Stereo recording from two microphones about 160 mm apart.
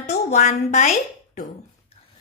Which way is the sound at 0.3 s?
50° left (ahead or behind).